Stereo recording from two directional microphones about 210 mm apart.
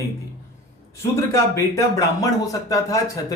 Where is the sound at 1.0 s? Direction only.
15° left (ahead or behind).